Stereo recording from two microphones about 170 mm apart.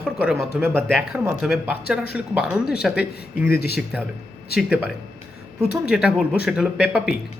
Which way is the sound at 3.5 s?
70° left (ahead or behind).